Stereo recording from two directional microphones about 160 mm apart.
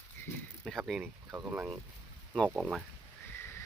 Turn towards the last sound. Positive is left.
turn(degrees=15)  # may be behind; listen again after turning